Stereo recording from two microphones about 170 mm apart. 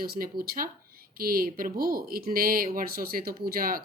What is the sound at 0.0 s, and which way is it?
Speech, 60° right (ahead or behind).